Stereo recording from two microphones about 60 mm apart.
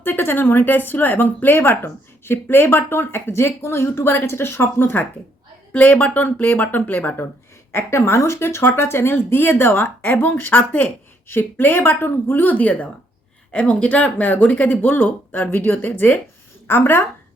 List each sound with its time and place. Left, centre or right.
0.0 s speech: left
5.7 s speech: left
7.7 s speech: left